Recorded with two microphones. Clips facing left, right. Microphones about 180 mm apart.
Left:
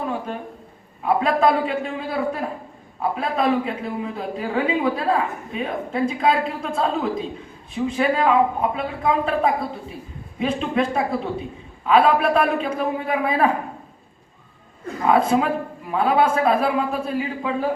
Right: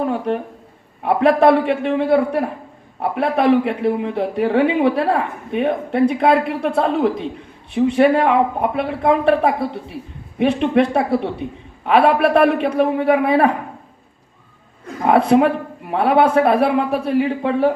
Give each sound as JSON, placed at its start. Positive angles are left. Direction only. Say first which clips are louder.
{"t": 1.0, "sound": "a man's voice", "louder": "right 5 dB", "side_deg": -70}
{"t": 15.0, "sound": "a man's voice", "louder": "right 5 dB", "side_deg": -65}